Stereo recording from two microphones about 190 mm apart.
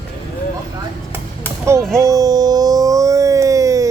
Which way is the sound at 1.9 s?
15° right (ahead or behind).